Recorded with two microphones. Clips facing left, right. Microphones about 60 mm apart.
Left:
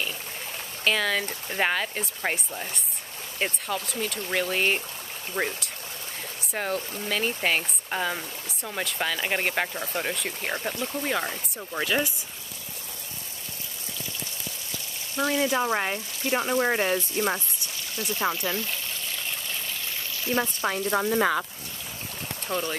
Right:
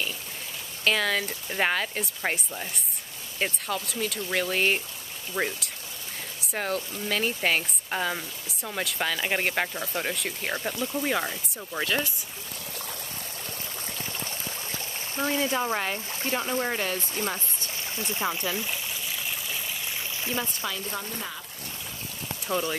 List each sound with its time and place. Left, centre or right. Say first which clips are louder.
0.8 s speech: even; centre
15.1 s speech: left 2 dB; right
15.4 s speech: left 2 dB; centre
16.3 s speech: left 4 dB; left
17.9 s speech: left 2 dB; right
18.5 s speech: left 1 dB; centre
20.3 s speech: left 8 dB; left
21.0 s speech: left 13 dB; left
22.5 s speech: right 1 dB; centre